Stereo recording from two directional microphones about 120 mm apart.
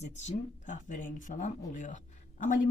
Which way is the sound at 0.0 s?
75° left (ahead or behind).